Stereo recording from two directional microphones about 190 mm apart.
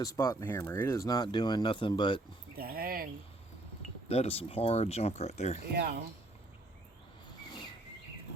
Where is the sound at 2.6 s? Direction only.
55° right (ahead or behind).